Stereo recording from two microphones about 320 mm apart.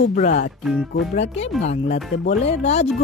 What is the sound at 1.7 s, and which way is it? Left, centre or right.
Speech, left.